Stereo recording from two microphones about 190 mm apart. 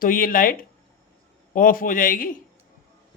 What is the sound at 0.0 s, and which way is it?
A man's voice, 50° left (ahead or behind).